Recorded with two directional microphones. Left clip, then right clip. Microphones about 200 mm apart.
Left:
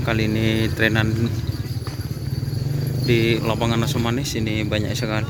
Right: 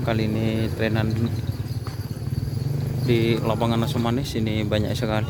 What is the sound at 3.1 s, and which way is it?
Speech, 5° right (ahead or behind).